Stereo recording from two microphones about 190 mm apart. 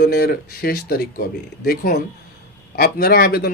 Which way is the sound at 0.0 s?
50° left (ahead or behind).